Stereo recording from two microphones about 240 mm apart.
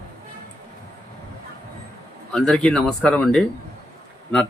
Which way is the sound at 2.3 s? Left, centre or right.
Centre.